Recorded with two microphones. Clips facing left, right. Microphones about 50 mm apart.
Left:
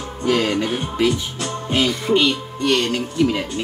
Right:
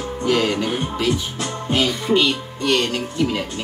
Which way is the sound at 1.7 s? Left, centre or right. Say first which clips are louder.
Left 1 dB; centre.